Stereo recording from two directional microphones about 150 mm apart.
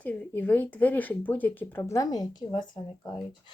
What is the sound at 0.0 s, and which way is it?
Speech, 10° left (ahead or behind).